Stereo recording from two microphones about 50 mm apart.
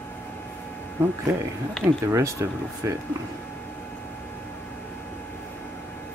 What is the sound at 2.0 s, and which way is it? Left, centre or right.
Speech, right.